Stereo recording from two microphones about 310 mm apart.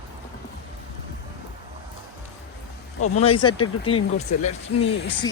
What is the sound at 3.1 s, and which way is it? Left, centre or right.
Speech, centre.